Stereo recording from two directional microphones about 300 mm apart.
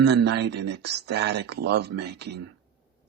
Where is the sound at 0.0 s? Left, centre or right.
Right.